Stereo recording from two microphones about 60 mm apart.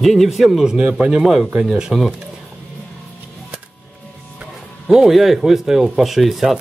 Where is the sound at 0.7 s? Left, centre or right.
Centre.